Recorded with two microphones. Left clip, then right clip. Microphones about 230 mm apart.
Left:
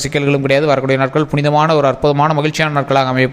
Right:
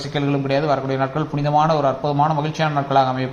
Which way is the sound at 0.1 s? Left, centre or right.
Left.